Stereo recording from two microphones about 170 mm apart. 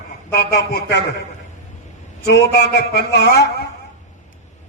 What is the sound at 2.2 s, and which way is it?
A man's voice, 70° left (ahead or behind).